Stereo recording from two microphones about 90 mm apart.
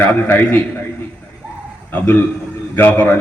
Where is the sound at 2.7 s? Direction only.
20° left (ahead or behind).